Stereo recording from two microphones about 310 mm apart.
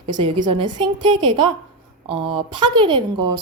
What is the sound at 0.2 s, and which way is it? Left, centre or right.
Speech, centre.